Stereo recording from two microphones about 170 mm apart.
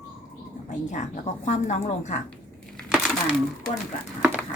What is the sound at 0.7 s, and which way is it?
A woman's voice, 50° left (ahead or behind).